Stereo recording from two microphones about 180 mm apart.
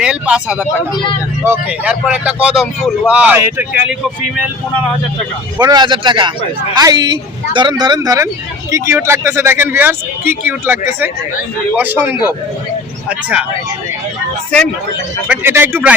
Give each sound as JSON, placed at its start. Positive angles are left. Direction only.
{"t": 0.0, "sound": "speech", "side_deg": -5}
{"t": 5.5, "sound": "a man's voice", "side_deg": -20}
{"t": 15.3, "sound": "speech", "side_deg": -10}